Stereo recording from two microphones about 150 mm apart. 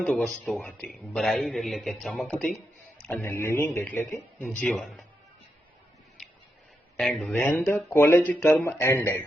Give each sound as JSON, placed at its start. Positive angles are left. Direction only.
{"t": 0.0, "sound": "a man's voice", "side_deg": 5}
{"t": 3.1, "sound": "speech", "side_deg": 15}
{"t": 4.5, "sound": "a man's voice", "side_deg": 0}
{"t": 6.2, "sound": "a sound", "side_deg": 0}
{"t": 7.2, "sound": "speech", "side_deg": 10}